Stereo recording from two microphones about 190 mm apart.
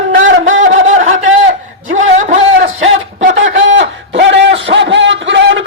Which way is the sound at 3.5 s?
75° right (ahead or behind).